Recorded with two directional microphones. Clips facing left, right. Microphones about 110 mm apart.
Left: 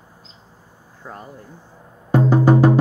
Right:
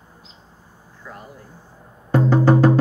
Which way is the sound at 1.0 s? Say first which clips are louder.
Left 2 dB; 30° left (ahead or behind).